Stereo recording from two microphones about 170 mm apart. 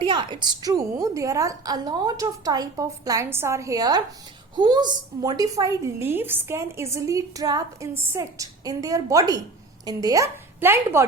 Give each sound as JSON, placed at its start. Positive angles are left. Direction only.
{"t": 0.0, "sound": "a woman's voice", "side_deg": -30}